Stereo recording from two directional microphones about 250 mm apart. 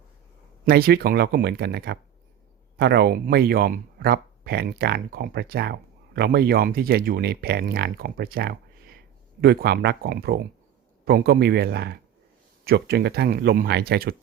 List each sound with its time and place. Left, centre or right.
0.6 s speech: right